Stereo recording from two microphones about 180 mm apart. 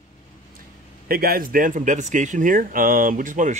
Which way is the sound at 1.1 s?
55° right (ahead or behind).